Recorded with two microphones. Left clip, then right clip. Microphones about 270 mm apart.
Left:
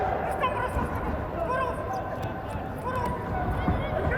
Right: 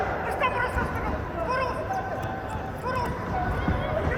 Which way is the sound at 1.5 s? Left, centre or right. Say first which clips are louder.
Right 1 dB; right.